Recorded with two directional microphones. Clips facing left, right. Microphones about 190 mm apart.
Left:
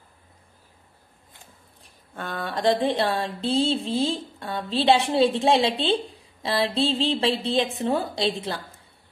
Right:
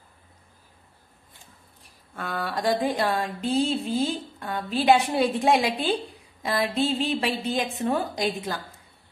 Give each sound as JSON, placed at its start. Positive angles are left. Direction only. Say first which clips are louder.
{"t": 2.1, "sound": "speech", "louder": "even", "side_deg": 30}